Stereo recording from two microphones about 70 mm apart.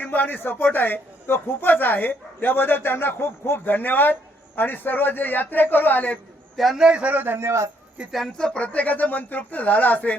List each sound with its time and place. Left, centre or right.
0.0 s a man's voice: left
6.6 s a man's voice: centre
6.8 s speech: centre
7.3 s a man's voice: right
8.1 s speech: centre
8.6 s a man's voice: left